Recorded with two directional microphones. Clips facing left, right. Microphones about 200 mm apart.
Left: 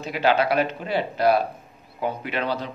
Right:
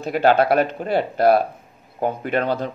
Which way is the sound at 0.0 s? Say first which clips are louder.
Right 4 dB; 50° right (ahead or behind).